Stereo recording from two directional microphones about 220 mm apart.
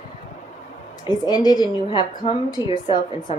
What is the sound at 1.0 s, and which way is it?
A woman's voice, 20° left (ahead or behind).